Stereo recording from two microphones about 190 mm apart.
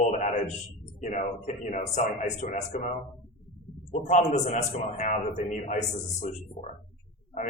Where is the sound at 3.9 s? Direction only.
40° left (ahead or behind).